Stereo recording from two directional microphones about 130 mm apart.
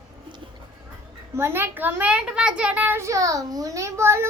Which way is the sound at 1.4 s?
20° right (ahead or behind).